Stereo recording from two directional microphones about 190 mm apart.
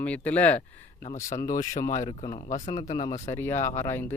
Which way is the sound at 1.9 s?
35° left (ahead or behind).